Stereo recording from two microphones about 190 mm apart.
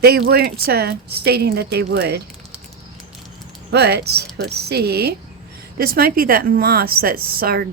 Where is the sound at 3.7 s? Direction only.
60° right (ahead or behind).